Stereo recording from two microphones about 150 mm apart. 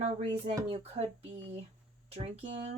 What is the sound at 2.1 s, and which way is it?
Speech, 40° right (ahead or behind).